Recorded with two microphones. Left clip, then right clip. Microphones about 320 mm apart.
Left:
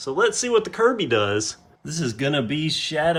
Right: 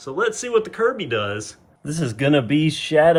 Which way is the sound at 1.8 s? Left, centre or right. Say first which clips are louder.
Right 3 dB; centre.